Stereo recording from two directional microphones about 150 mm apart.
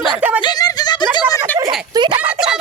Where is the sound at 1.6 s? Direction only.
25° right (ahead or behind).